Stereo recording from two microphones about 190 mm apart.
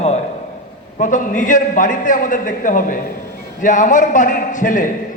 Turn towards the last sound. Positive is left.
turn(degrees=45)  # may be behind; listen again after turning